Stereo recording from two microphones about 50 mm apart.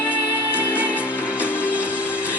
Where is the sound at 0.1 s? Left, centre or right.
Right.